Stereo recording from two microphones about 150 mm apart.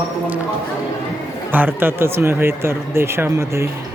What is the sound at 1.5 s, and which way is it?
Speech, 15° right (ahead or behind).